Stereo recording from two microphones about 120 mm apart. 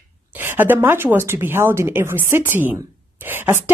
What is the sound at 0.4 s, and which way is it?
Speech, 15° right (ahead or behind).